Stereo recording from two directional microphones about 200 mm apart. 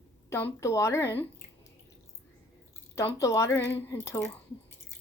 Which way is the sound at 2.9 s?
15° left (ahead or behind).